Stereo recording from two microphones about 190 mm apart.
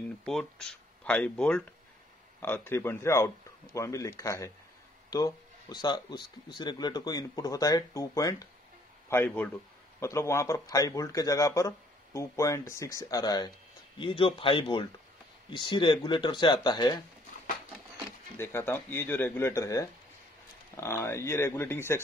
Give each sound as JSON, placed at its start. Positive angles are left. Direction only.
{"t": 0.2, "sound": "speech", "side_deg": 5}
{"t": 18.4, "sound": "speech", "side_deg": 10}